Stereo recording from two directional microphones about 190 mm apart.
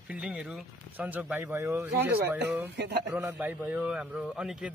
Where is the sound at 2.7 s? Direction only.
60° right (ahead or behind).